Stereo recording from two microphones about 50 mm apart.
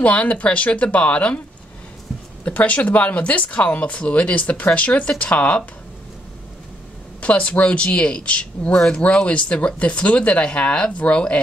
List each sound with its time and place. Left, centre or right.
0.0 s speech: left
2.4 s speech: left
7.2 s speech: left